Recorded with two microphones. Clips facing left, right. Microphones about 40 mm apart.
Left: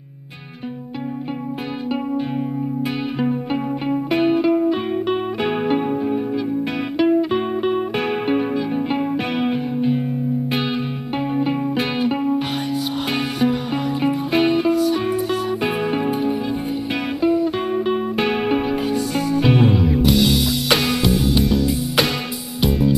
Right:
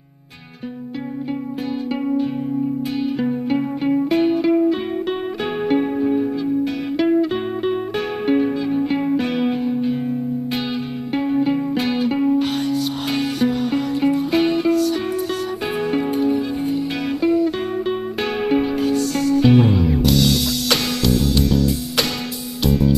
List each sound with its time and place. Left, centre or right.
5.4 s music: left
8.1 s music: left
11.7 s music: centre
13.0 s music: centre
18.1 s music: centre